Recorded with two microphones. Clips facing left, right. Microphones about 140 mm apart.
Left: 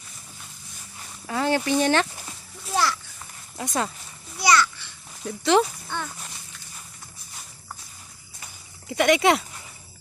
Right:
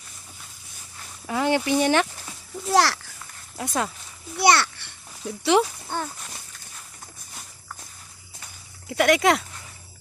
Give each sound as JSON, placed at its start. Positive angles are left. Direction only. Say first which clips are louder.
{"t": 1.3, "sound": "speech", "louder": "right 1 dB", "side_deg": -15}
{"t": 2.7, "sound": "a child's voice", "louder": "right 4 dB", "side_deg": -90}
{"t": 3.6, "sound": "speech", "louder": "even", "side_deg": 0}
{"t": 4.4, "sound": "a child's voice", "louder": "right 1 dB", "side_deg": -60}
{"t": 5.2, "sound": "speech", "louder": "even", "side_deg": -10}
{"t": 5.9, "sound": "a sound", "louder": "right 3 dB", "side_deg": -40}
{"t": 8.9, "sound": "speech", "louder": "even", "side_deg": 0}